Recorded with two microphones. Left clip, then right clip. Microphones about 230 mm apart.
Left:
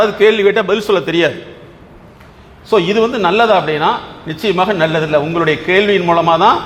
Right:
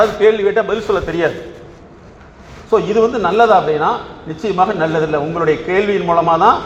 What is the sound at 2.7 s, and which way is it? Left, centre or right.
A man's voice, left.